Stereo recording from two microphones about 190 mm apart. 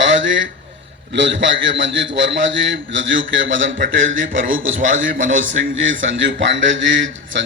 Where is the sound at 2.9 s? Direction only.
85° right.